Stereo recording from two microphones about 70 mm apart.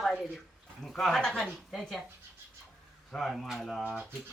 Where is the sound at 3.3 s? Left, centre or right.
Centre.